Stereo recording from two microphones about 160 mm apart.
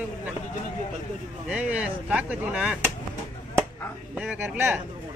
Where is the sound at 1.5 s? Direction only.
5° right (ahead or behind).